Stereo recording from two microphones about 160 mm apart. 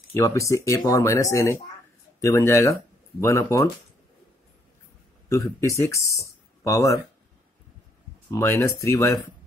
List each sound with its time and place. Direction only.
0.1 s speech: 20° left (ahead or behind)
5.3 s speech: 20° left (ahead or behind)
8.3 s speech: 20° left (ahead or behind)